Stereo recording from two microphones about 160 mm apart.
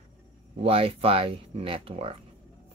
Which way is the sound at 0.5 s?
35° right (ahead or behind).